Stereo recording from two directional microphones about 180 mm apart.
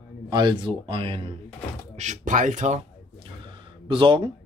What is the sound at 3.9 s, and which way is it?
Speech, 30° right (ahead or behind).